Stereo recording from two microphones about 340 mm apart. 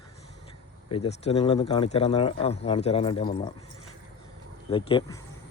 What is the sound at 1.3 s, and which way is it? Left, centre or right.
A man's voice, centre.